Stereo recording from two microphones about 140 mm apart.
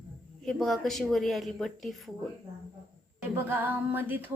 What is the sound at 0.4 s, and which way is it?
Speech, centre (ahead or behind).